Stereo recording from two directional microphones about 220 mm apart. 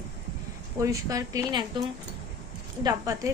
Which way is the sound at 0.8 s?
15° right (ahead or behind).